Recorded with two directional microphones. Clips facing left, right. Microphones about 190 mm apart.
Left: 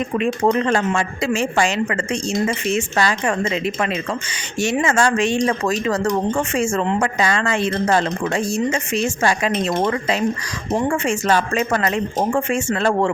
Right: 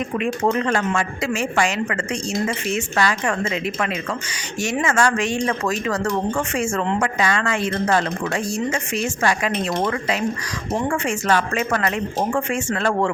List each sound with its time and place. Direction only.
0.2 s speech: 30° left (ahead or behind)